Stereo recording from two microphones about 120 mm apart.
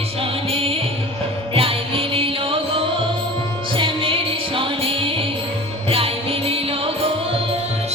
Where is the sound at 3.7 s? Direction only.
45° right (ahead or behind).